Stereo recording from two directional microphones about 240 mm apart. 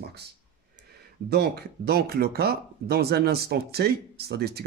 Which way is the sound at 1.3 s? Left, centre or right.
Right.